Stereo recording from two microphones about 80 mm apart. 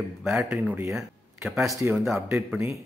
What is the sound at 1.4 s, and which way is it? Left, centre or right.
Speech, centre.